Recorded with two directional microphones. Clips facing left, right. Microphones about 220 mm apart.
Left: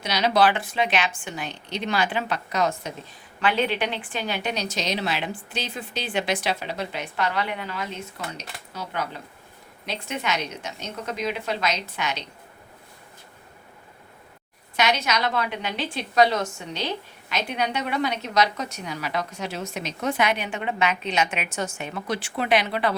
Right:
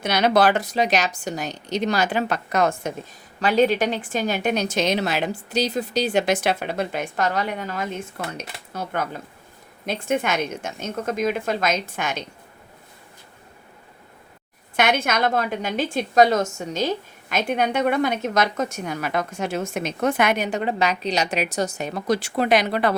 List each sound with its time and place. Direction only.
0.0 s a woman's voice: 55° right (ahead or behind)
3.4 s a woman's voice: 40° right (ahead or behind)
14.8 s a woman's voice: 50° right (ahead or behind)